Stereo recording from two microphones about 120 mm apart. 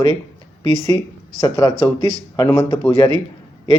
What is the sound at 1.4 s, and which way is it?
Speech, 40° left (ahead or behind).